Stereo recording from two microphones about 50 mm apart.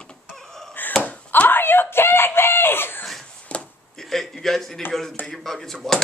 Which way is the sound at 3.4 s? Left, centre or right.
Left.